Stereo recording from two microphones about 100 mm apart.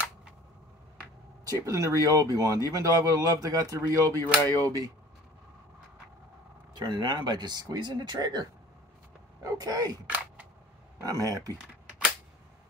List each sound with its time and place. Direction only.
1.4 s speech: 35° right (ahead or behind)
6.7 s speech: 50° right (ahead or behind)
10.0 s single-lens reflex camera: 15° right (ahead or behind)
11.0 s speech: 35° right (ahead or behind)